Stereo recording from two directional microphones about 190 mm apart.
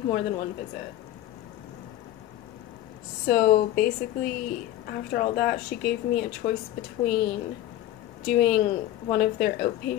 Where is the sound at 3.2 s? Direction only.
55° left (ahead or behind).